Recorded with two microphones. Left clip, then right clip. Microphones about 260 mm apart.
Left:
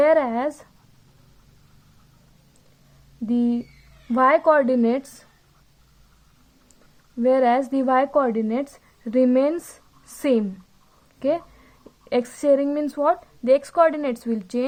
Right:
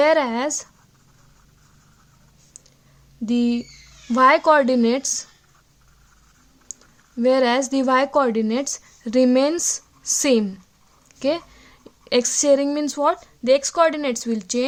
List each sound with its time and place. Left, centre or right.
0.0 s speech: right
3.2 s a woman's voice: right
7.2 s a woman's voice: right